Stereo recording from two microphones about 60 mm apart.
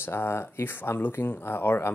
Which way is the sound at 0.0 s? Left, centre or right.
Left.